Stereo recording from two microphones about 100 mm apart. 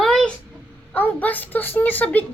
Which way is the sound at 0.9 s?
15° left (ahead or behind).